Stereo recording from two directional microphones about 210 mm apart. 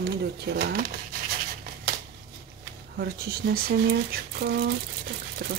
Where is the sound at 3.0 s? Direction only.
45° right (ahead or behind).